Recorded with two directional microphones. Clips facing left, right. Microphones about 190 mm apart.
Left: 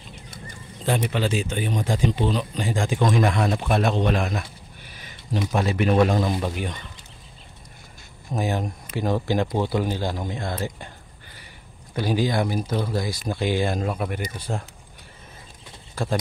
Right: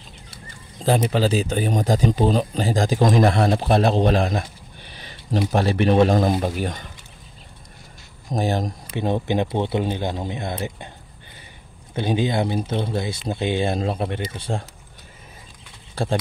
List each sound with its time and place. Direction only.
0.7 s speech: 35° right (ahead or behind)
6.3 s speech: 40° right (ahead or behind)
8.3 s speech: 35° right (ahead or behind)
8.9 s speech: 20° right (ahead or behind)
11.9 s speech: 25° right (ahead or behind)
15.9 s speech: 30° right (ahead or behind)